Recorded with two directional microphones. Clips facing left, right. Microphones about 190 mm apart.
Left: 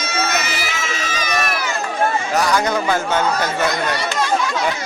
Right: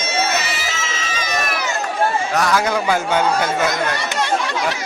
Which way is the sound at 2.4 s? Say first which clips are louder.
Left 1 dB; centre (ahead or behind).